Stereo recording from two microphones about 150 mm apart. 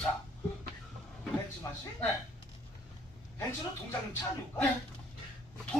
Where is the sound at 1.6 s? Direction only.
25° left (ahead or behind).